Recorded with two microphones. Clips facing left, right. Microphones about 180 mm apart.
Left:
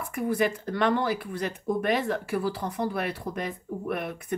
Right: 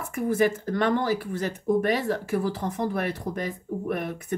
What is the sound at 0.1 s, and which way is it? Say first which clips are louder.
Speech: right 3 dB; 45° right (ahead or behind).